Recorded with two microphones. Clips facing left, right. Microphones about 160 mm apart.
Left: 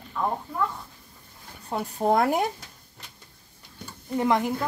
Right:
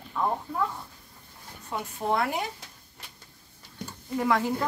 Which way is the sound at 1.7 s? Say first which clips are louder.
Left 5 dB; 40° left (ahead or behind).